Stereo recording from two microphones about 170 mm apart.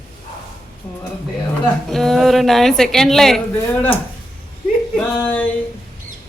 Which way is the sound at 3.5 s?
10° left (ahead or behind).